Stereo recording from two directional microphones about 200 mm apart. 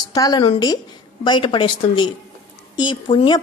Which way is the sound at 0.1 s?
20° left (ahead or behind).